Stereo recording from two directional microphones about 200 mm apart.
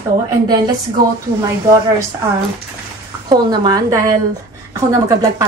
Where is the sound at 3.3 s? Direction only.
20° right (ahead or behind).